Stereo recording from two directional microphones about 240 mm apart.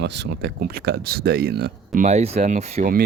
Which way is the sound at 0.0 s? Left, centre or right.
Right.